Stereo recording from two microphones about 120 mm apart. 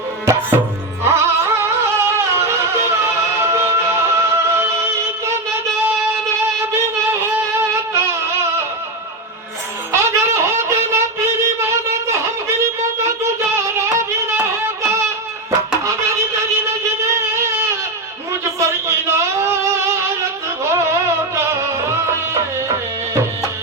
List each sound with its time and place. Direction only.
0.3 s tabla: 25° right (ahead or behind)
1.0 s music: 20° right (ahead or behind)
9.9 s wind instrument: 20° right (ahead or behind)
13.1 s music: 25° right (ahead or behind)
16.0 s a sound: 25° right (ahead or behind)
20.7 s music: 20° right (ahead or behind)